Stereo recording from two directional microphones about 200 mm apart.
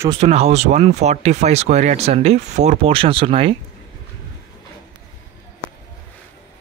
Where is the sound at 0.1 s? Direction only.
30° right (ahead or behind).